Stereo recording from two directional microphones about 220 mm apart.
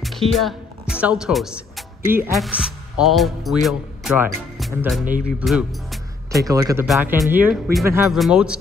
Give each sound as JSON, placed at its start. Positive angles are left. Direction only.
{"t": 0.0, "sound": "speech", "side_deg": 0}
{"t": 6.3, "sound": "speech", "side_deg": -15}
{"t": 6.9, "sound": "speech", "side_deg": -5}